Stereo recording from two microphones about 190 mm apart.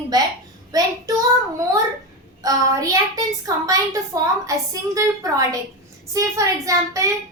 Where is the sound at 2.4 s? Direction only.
20° right (ahead or behind).